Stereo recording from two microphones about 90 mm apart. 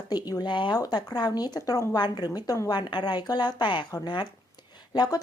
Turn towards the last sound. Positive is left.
turn(degrees=45)  # may be behind; listen again after turning